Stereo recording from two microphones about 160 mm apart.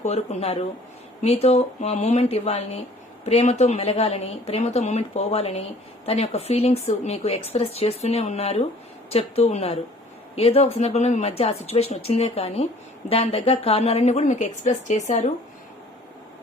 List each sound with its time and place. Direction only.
0.0 s a woman's voice: 40° left (ahead or behind)